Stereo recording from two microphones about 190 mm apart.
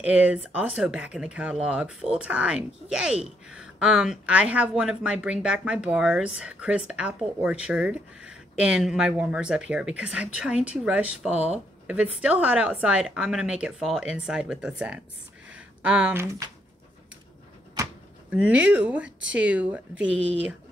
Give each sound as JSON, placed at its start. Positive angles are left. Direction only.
{"t": 0.0, "sound": "speech", "side_deg": -5}
{"t": 11.2, "sound": "speech", "side_deg": -35}
{"t": 11.5, "sound": "speech", "side_deg": -5}
{"t": 18.3, "sound": "speech", "side_deg": -5}